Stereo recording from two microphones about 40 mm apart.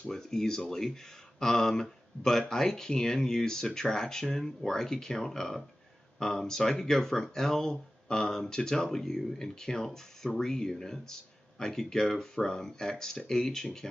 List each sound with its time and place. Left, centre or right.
0.1 s speech: centre